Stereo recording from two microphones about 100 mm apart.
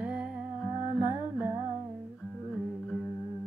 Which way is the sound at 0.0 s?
15° right (ahead or behind).